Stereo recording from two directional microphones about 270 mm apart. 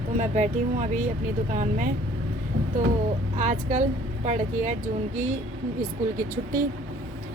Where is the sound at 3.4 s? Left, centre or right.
Right.